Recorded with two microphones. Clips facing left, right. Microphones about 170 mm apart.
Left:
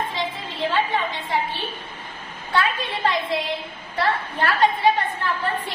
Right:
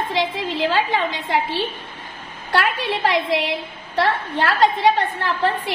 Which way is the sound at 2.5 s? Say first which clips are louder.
Right 3 dB; 75° right (ahead or behind).